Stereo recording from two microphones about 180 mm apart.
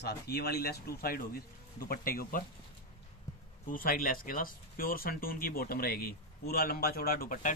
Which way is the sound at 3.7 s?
50° left (ahead or behind).